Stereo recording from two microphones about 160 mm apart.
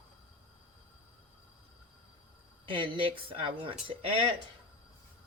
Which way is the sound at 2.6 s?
30° right (ahead or behind).